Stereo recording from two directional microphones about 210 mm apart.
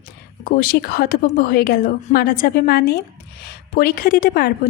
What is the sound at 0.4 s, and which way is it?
A woman's voice, 45° left (ahead or behind).